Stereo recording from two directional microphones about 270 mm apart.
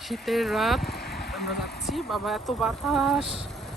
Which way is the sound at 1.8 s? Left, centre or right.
Centre.